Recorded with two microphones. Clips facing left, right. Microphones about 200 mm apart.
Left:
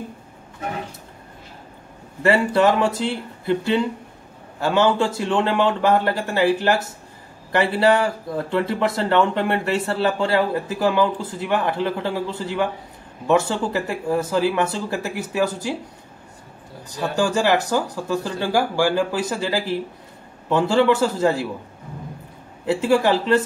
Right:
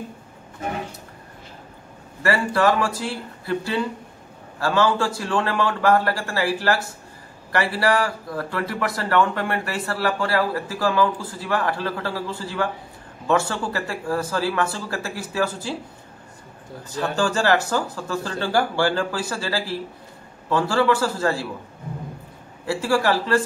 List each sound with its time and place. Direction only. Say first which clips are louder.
2.2 s speech: left 3 dB; 20° left (ahead or behind)
16.9 s speech: left 2 dB; 15° left (ahead or behind)
22.7 s speech: left 3 dB; 20° left (ahead or behind)